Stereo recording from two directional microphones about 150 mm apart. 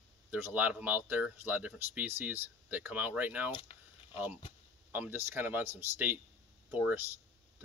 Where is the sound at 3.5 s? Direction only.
35° left (ahead or behind).